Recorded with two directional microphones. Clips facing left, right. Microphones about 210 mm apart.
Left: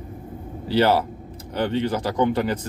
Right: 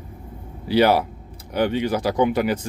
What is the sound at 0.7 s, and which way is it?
Speech, 15° right (ahead or behind).